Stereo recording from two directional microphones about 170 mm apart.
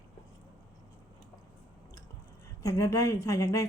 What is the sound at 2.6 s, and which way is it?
Speech, 20° left (ahead or behind).